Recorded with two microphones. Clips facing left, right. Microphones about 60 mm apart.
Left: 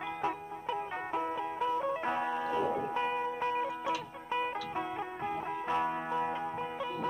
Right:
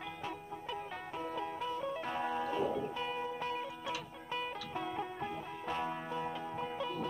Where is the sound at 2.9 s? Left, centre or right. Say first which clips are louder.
Left 6 dB; left.